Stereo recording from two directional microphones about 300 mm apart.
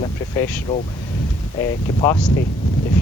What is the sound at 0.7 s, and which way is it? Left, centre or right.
Speech, left.